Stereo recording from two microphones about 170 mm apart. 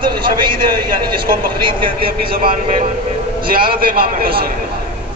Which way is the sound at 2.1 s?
60° right (ahead or behind).